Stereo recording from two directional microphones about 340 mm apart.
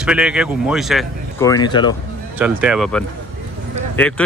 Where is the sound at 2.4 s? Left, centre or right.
Centre.